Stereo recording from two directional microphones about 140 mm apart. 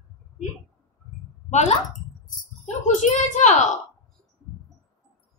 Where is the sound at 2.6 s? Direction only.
60° left (ahead or behind).